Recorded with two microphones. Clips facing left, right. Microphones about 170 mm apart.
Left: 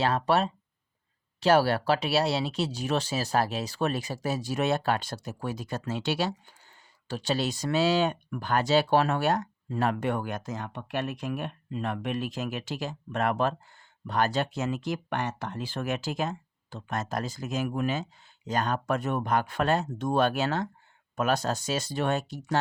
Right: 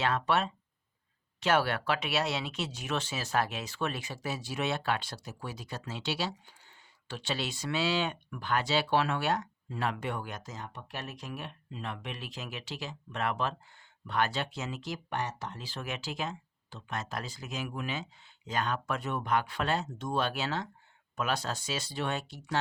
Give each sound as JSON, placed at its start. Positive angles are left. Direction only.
{"t": 0.0, "sound": "speech", "side_deg": 35}